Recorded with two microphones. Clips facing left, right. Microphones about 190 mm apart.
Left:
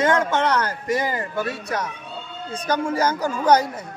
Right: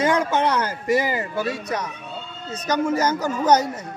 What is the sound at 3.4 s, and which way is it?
Speech, 10° left (ahead or behind).